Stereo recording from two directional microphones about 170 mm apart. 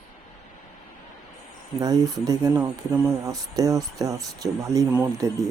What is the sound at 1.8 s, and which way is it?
Speech, 20° right (ahead or behind).